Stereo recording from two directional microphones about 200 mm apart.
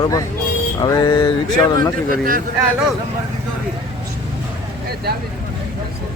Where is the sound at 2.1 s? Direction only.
45° right (ahead or behind).